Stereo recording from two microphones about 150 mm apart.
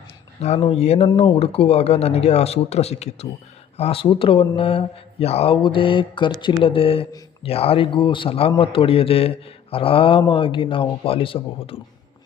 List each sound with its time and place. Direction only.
0.3 s speech: 45° left (ahead or behind)